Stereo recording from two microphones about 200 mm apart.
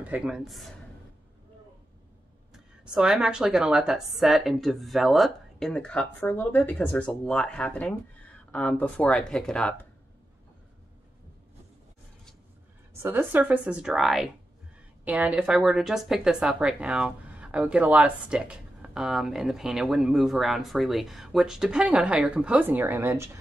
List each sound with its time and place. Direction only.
0.0 s speech: 5° right (ahead or behind)
2.5 s speech: 5° right (ahead or behind)
13.0 s speech: 10° right (ahead or behind)